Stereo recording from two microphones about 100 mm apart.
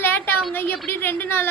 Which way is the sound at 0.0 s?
20° left (ahead or behind).